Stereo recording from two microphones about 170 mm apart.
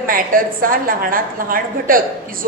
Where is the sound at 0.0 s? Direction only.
55° right (ahead or behind).